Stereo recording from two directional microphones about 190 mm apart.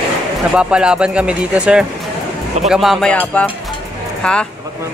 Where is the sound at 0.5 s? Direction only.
5° right (ahead or behind).